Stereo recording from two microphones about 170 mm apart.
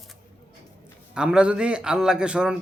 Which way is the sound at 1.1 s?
5° right (ahead or behind).